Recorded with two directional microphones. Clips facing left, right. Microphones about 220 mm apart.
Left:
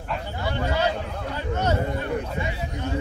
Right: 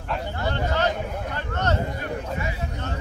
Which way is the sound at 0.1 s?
10° left (ahead or behind).